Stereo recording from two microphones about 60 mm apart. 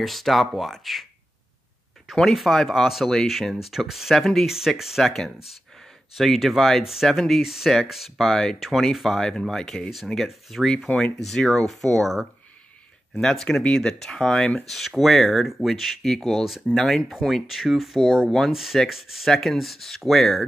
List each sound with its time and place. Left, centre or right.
0.0 s speech: centre
2.1 s speech: centre
5.1 s speech: centre
8.3 s speech: centre
8.5 s speech: centre